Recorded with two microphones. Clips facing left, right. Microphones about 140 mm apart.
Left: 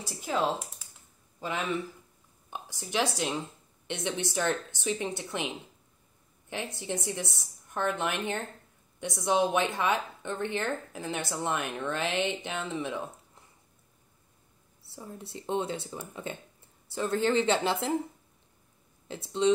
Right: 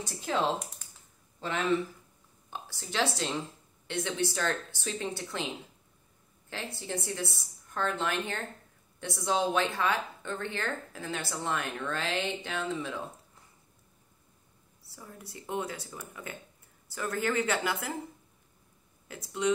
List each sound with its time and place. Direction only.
0.0 s a woman's voice: 5° left (ahead or behind)
6.5 s a woman's voice: 20° left (ahead or behind)
14.9 s a woman's voice: 25° left (ahead or behind)
19.0 s a woman's voice: 25° left (ahead or behind)